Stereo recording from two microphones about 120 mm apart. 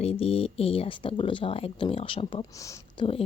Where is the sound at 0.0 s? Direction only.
55° left (ahead or behind).